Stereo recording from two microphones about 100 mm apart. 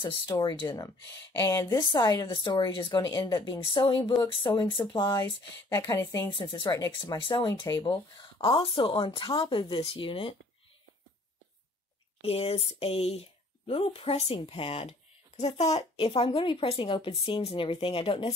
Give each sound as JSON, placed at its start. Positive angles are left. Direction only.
{"t": 0.0, "sound": "speech", "side_deg": 45}
{"t": 2.0, "sound": "speech", "side_deg": 35}
{"t": 2.3, "sound": "speech", "side_deg": 50}
{"t": 3.7, "sound": "speech", "side_deg": 55}
{"t": 6.9, "sound": "speech", "side_deg": 50}
{"t": 12.2, "sound": "speech", "side_deg": 80}
{"t": 16.3, "sound": "speech", "side_deg": 55}